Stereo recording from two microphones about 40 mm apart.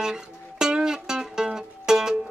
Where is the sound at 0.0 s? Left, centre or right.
Centre.